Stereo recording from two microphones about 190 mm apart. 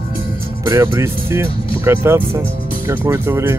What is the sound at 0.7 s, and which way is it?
Speech, 15° right (ahead or behind).